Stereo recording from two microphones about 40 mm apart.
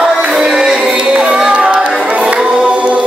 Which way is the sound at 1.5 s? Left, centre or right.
Right.